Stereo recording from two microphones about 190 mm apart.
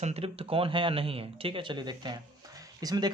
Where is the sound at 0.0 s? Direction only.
30° right (ahead or behind).